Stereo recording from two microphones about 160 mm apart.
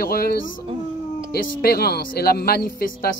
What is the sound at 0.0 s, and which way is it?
Speech, 70° left (ahead or behind).